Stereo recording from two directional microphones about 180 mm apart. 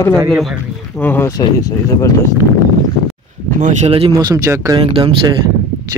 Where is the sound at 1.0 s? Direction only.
10° left (ahead or behind).